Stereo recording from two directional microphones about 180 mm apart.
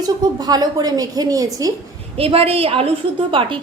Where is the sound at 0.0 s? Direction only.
20° right (ahead or behind).